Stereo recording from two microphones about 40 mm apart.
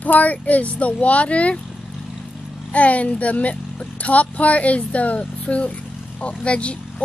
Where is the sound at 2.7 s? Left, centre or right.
Left.